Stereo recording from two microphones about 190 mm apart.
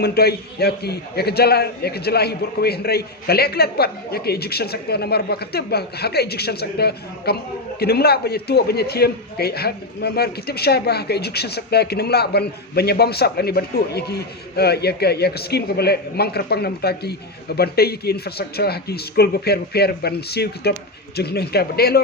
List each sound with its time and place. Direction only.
0.0 s a man's voice: 55° left (ahead or behind)